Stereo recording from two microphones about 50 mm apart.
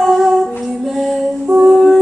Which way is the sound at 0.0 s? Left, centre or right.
Centre.